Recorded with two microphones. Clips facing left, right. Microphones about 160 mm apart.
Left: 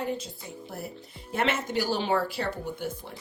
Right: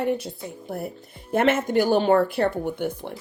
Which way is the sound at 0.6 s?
50° right (ahead or behind).